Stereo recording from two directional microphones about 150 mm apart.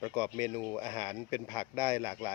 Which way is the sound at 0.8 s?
35° left (ahead or behind).